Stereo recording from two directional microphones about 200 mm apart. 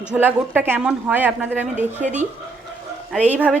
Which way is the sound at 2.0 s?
35° right (ahead or behind).